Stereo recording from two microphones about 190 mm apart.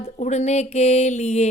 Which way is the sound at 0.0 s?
35° left (ahead or behind).